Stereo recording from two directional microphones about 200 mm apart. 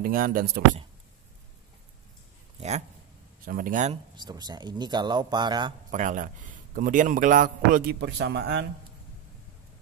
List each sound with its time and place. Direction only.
0.0 s speech: 45° right (ahead or behind)
3.4 s a man's voice: 45° right (ahead or behind)
4.2 s speech: 20° right (ahead or behind)
5.9 s a man's voice: 40° right (ahead or behind); by 8.6 s 60° right (ahead or behind)